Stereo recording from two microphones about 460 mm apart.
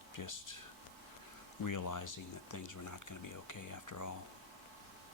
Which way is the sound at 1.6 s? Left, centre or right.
Left.